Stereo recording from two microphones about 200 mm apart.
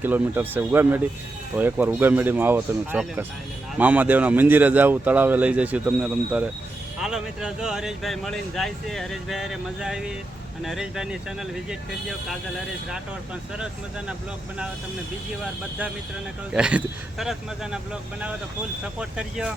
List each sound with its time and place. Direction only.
0.0 s speech: 10° right (ahead or behind)
16.5 s speech: 5° right (ahead or behind)
18.9 s speech: 5° right (ahead or behind)